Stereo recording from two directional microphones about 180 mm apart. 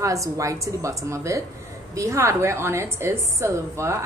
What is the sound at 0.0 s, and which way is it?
A woman's voice, 15° right (ahead or behind).